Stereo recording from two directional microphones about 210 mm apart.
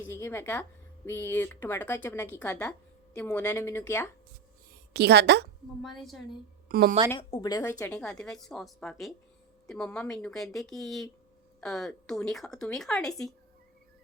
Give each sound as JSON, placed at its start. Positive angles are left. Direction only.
{"t": 0.1, "sound": "speech", "side_deg": 10}
{"t": 4.9, "sound": "a woman's voice", "side_deg": -50}
{"t": 5.8, "sound": "a woman's voice", "side_deg": 0}
{"t": 6.7, "sound": "a woman's voice", "side_deg": -45}
{"t": 7.2, "sound": "speech", "side_deg": 20}
{"t": 7.8, "sound": "a woman's voice", "side_deg": 5}